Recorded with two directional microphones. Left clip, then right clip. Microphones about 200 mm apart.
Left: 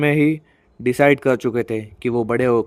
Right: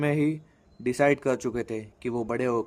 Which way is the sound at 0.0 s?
20° left (ahead or behind).